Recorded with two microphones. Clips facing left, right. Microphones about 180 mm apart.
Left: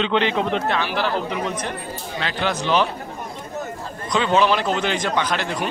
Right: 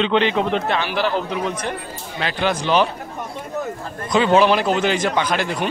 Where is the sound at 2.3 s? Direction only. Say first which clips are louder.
Right 2 dB; 15° right (ahead or behind).